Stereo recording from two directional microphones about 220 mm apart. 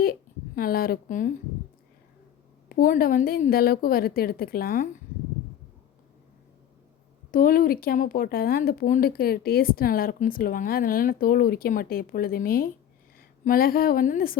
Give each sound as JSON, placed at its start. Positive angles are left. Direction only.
{"t": 0.0, "sound": "a sound", "side_deg": 40}
{"t": 2.6, "sound": "speech", "side_deg": 40}
{"t": 7.3, "sound": "speech", "side_deg": 40}